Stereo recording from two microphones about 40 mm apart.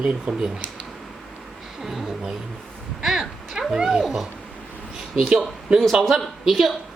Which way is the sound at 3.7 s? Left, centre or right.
Centre.